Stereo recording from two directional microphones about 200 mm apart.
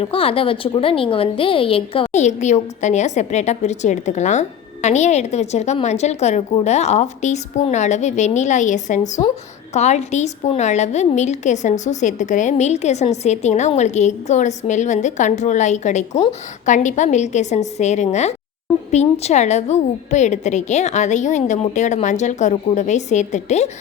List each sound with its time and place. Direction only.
0.0 s a woman's voice: 30° left (ahead or behind)